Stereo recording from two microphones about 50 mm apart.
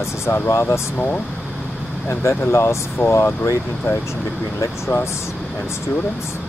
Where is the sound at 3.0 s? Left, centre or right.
Left.